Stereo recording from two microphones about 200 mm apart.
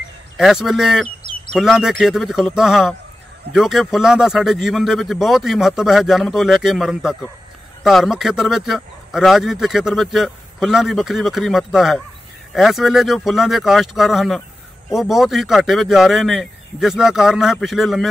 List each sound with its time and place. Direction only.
0.4 s a man's voice: centre (ahead or behind)
1.0 s bird: 45° left (ahead or behind)
1.5 s a man's voice: centre (ahead or behind)